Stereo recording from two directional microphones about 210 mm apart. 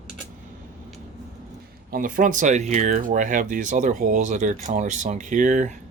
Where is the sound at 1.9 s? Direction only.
40° right (ahead or behind).